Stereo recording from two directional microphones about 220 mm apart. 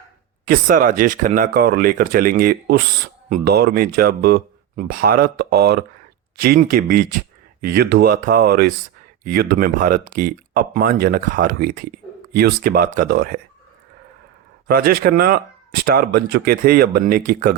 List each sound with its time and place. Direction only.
0.4 s speech: 40° right (ahead or behind)
14.7 s speech: 45° right (ahead or behind)